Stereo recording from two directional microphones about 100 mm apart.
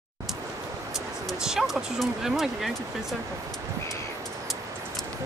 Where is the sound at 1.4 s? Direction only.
5° right (ahead or behind).